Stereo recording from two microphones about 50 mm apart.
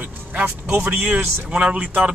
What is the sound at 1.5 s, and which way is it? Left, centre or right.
Speech, right.